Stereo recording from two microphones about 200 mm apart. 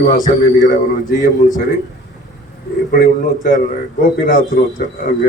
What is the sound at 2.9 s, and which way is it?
Speech, 45° left (ahead or behind).